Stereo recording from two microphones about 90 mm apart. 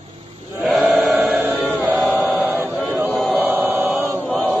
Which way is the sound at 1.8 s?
25° right (ahead or behind).